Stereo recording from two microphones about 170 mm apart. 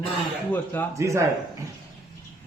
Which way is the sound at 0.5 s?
10° left (ahead or behind).